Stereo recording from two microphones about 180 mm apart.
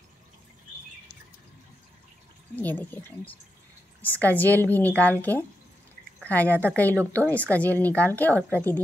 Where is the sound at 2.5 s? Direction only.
10° left (ahead or behind).